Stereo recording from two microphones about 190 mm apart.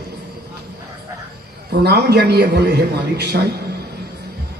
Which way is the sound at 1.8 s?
60° right (ahead or behind).